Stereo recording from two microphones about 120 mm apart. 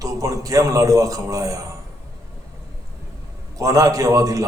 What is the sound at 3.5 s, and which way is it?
Speech, 30° right (ahead or behind).